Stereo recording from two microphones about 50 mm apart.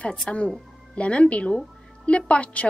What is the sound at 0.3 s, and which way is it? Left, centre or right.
Speech, centre.